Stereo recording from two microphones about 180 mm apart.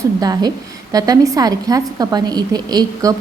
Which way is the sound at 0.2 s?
20° right (ahead or behind).